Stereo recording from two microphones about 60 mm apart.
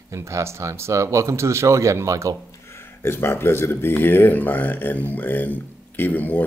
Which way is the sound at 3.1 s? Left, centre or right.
Left.